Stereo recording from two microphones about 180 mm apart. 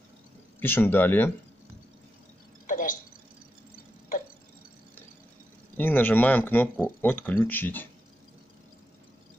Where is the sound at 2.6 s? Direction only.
45° left (ahead or behind).